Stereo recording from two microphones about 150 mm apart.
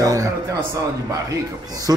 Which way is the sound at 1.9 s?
25° right (ahead or behind).